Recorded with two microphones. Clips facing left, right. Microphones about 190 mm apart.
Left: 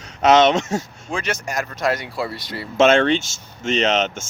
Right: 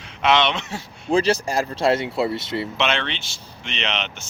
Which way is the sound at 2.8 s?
45° left (ahead or behind).